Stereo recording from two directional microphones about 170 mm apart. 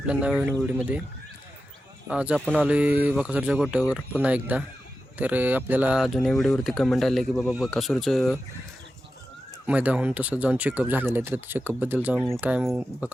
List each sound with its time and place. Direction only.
0.0 s speech: 5° right (ahead or behind)
2.0 s speech: 5° right (ahead or behind)
9.6 s speech: 10° right (ahead or behind)